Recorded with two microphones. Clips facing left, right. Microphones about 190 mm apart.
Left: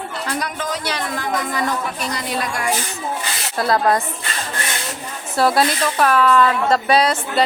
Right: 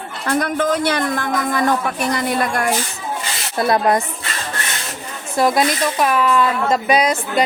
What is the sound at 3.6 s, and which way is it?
Speech, 20° right (ahead or behind).